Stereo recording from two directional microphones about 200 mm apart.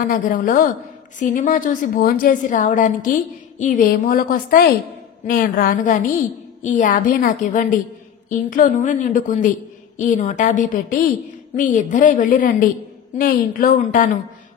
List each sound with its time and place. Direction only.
0.0 s a woman's voice: 40° left (ahead or behind)